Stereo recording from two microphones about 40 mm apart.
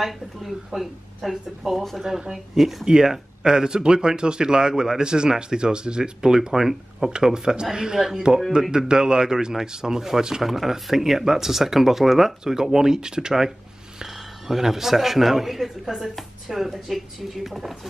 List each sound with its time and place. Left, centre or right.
0.0 s speech: centre
2.0 s speech: centre
2.3 s speech: centre
2.8 s speech: centre